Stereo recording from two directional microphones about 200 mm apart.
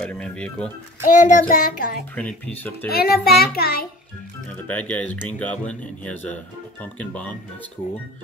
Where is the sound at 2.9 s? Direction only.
50° left (ahead or behind).